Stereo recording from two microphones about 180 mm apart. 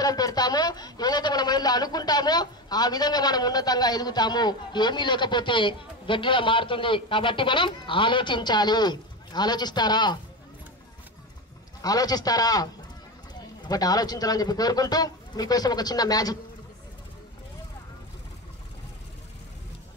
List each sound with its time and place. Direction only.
0.0 s a man's voice: 20° left (ahead or behind)
11.8 s speech: 20° left (ahead or behind)
13.7 s speech: 20° left (ahead or behind)